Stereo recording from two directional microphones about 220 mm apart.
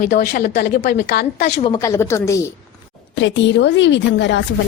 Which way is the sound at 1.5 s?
30° left (ahead or behind).